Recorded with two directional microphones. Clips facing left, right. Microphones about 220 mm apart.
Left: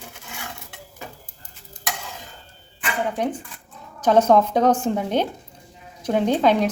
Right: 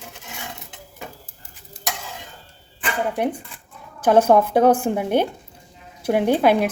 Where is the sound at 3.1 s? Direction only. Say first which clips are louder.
Right 2 dB; 10° right (ahead or behind).